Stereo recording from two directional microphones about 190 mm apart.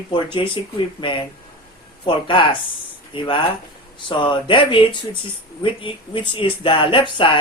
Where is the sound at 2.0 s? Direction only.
25° left (ahead or behind).